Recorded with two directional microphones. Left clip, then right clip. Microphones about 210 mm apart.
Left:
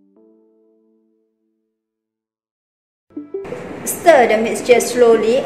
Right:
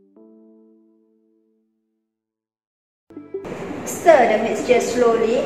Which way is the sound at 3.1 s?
Centre (ahead or behind).